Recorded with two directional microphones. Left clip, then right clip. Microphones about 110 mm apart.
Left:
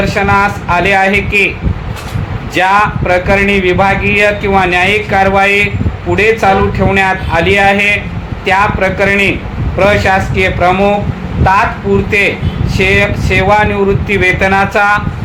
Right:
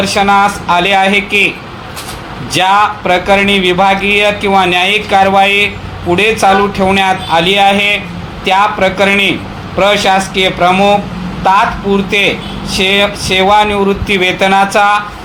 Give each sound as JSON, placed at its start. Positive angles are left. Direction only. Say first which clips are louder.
{"t": 0.0, "sound": "a man's voice", "louder": "right 2 dB", "side_deg": -45}
{"t": 2.5, "sound": "a man's voice", "louder": "even", "side_deg": -50}
{"t": 12.1, "sound": "a man's voice", "louder": "even", "side_deg": -50}